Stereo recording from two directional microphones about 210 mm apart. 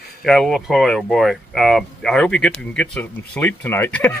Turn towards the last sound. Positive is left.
turn(degrees=10)  # may be behind; listen again after turning